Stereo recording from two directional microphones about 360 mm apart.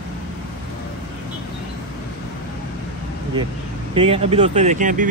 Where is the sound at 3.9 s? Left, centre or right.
Centre.